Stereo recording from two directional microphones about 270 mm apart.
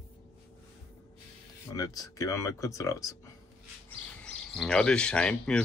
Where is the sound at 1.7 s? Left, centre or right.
Centre.